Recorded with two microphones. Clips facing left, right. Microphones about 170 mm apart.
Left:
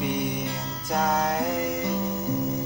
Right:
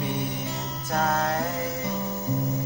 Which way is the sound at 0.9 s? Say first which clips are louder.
Left 1 dB; 15° left (ahead or behind).